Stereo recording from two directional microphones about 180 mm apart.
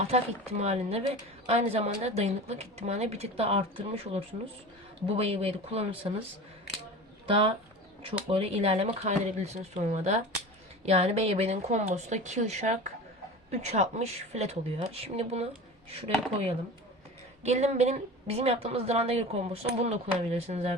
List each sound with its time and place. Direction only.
0.0 s a woman's voice: 35° right (ahead or behind)
7.3 s a woman's voice: 30° right (ahead or behind)